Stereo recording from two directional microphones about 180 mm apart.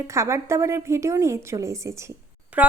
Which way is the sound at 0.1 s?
15° right (ahead or behind).